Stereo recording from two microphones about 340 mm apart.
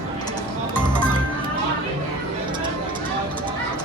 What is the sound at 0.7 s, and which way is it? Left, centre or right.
Music, centre.